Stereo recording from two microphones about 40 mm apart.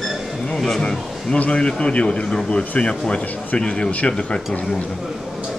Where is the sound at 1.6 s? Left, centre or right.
Left.